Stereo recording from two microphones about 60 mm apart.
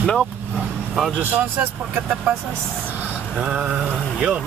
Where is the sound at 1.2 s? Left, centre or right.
Right.